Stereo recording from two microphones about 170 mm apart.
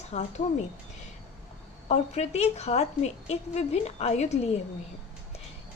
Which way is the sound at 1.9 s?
40° left (ahead or behind).